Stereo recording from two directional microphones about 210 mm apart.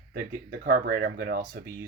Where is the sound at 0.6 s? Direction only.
45° right (ahead or behind).